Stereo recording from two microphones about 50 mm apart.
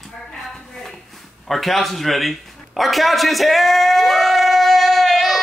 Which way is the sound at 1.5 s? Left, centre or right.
Centre.